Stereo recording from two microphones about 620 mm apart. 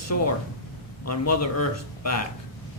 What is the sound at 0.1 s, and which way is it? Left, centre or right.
A man's voice, left.